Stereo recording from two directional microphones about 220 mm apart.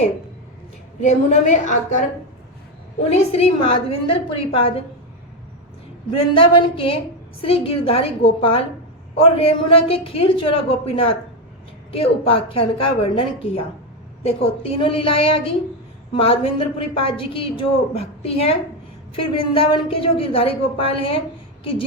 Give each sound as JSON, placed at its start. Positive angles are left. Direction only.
{"t": 1.0, "sound": "a woman's voice", "side_deg": 30}
{"t": 3.1, "sound": "a woman's voice", "side_deg": 30}
{"t": 6.1, "sound": "a woman's voice", "side_deg": 25}
{"t": 21.6, "sound": "a sound", "side_deg": 25}